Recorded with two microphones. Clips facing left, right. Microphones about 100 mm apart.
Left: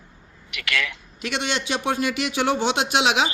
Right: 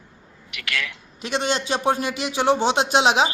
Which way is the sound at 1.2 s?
35° right (ahead or behind).